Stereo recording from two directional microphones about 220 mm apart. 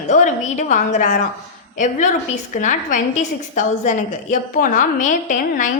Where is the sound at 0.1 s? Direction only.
35° left (ahead or behind).